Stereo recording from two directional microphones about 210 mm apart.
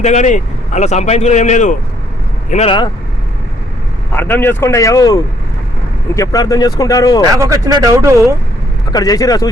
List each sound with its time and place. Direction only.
0.0 s a man's voice: 35° left (ahead or behind)
4.1 s speech: 10° left (ahead or behind)
7.3 s speech: 15° right (ahead or behind)
8.9 s speech: 20° left (ahead or behind)